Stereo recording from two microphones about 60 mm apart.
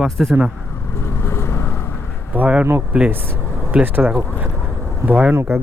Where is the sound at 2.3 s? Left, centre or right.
Right.